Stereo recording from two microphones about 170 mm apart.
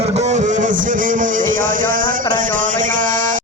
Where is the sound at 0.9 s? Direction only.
50° right (ahead or behind).